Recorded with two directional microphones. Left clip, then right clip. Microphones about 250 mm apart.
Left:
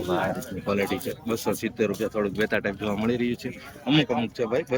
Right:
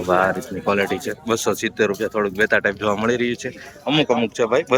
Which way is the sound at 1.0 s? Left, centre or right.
Centre.